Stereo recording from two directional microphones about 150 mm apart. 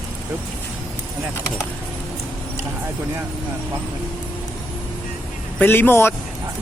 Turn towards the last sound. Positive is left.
turn(degrees=15)  # may be behind; listen again after turning